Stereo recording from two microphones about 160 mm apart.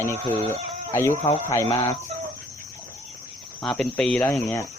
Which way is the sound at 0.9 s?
15° left (ahead or behind).